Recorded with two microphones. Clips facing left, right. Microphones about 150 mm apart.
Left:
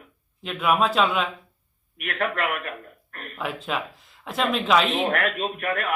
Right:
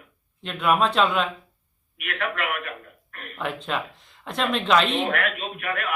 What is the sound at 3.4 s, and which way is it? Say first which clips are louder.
Speech: even; 5° left (ahead or behind).